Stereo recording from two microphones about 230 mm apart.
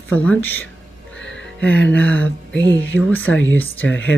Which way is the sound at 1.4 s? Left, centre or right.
Centre.